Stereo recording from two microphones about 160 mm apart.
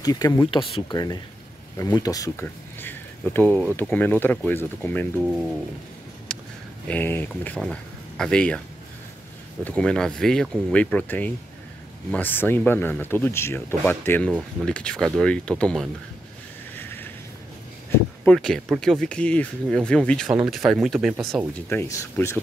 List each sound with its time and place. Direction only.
0.0 s speech: 25° left (ahead or behind); by 5.5 s centre (ahead or behind)
6.3 s a sound: 5° left (ahead or behind)
6.9 s speech: 10° left (ahead or behind)
9.7 s speech: 5° left (ahead or behind)
16.7 s a sound: 10° left (ahead or behind)
18.2 s speech: 5° left (ahead or behind)
21.6 s speech: 15° left (ahead or behind)